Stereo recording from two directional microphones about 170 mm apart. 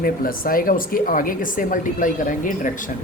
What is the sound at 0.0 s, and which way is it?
Speech, 55° left (ahead or behind).